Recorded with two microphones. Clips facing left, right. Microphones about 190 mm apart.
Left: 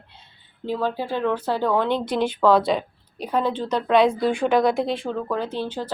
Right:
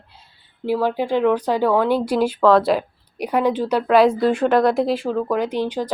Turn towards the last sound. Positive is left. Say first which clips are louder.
# right 5 dB
turn(degrees=-15)  # may be behind; listen again after turning